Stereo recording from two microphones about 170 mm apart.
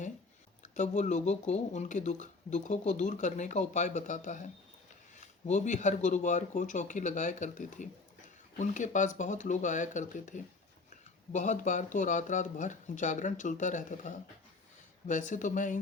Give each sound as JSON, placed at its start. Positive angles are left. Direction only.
{"t": 0.6, "sound": "speech", "side_deg": 45}